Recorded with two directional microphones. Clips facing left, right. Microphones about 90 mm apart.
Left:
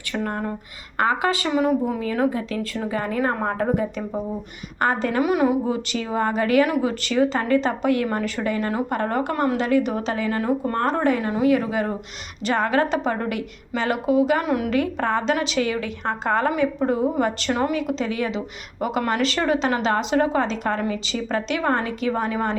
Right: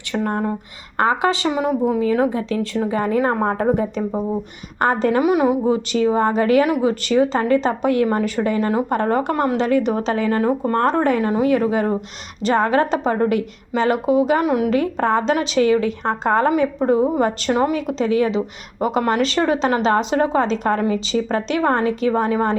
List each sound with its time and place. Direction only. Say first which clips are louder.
0.1 s a woman's voice: right 5 dB; 25° right (ahead or behind)
5.2 s a woman's voice: even; 20° right (ahead or behind)